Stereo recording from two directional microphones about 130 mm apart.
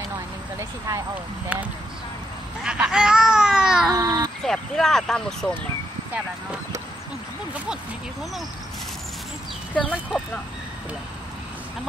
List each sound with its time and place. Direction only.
0.6 s speech: 25° right (ahead or behind)
1.5 s speech: 10° right (ahead or behind)
2.6 s a sound: 5° right (ahead or behind)
3.9 s a sound: 30° right (ahead or behind)
4.5 s speech: 5° left (ahead or behind)
7.5 s speech: 5° right (ahead or behind)
9.8 s speech: 10° left (ahead or behind)